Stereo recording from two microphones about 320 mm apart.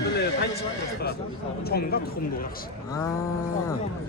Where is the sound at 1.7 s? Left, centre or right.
Left.